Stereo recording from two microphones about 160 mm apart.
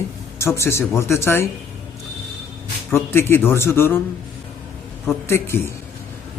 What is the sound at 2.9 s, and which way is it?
Speech, 15° left (ahead or behind).